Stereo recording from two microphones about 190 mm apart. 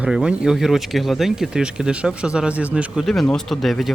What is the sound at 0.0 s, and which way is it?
Speech, 5° right (ahead or behind).